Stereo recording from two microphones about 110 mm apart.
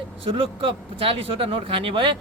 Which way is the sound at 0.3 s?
55° right (ahead or behind).